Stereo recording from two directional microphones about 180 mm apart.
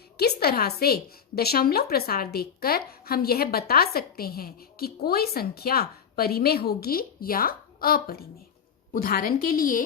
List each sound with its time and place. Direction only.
0.2 s a woman's voice: 60° left (ahead or behind)